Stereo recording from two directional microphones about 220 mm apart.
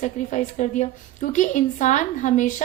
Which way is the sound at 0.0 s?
35° left (ahead or behind).